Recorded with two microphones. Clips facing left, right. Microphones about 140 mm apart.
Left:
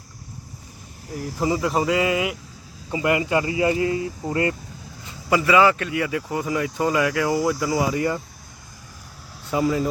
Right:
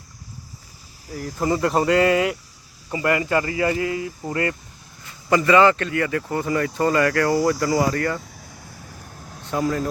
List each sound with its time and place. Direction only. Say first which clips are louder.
1.4 s speech: right 2 dB; 5° left (ahead or behind)
2.9 s speech: even; 15° left (ahead or behind)
5.3 s speech: right 2 dB; 5° left (ahead or behind)
9.5 s speech: left 2 dB; 5° left (ahead or behind)